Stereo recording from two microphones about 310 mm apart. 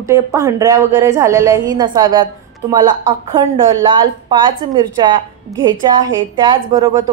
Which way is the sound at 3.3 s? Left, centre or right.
Centre.